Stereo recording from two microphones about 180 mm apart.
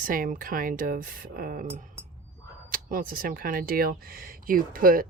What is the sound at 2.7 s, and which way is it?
Speech, 50° right (ahead or behind).